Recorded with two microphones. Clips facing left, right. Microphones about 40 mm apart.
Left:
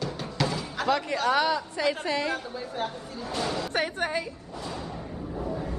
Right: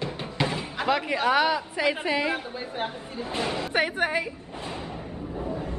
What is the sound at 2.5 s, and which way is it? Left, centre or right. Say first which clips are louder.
A woman's voice: right 1 dB; right.